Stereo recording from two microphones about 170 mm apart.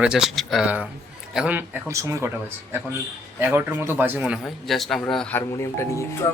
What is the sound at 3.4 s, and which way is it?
A man's voice, 10° right (ahead or behind).